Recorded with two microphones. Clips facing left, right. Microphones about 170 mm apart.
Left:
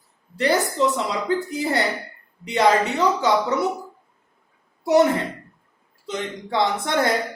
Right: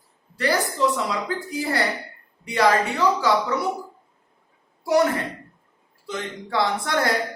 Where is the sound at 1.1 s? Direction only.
25° left (ahead or behind).